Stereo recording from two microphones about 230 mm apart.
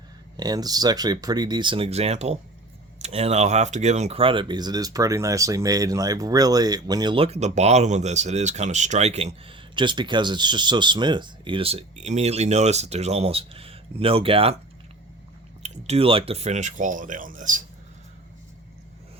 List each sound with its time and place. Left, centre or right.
0.3 s speech: centre
15.6 s speech: right